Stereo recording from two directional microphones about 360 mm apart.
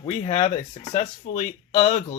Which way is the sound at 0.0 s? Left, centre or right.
Centre.